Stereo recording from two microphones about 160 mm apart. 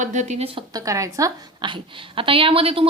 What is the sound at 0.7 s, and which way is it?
A woman's voice, 20° right (ahead or behind).